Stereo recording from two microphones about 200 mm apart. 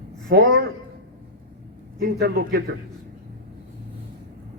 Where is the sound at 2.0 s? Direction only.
50° right (ahead or behind).